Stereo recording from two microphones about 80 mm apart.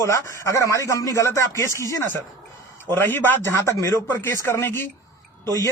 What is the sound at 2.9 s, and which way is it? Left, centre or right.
A man's voice, left.